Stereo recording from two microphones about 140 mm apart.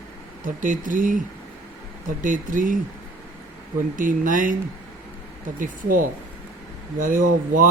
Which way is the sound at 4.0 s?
70° right (ahead or behind).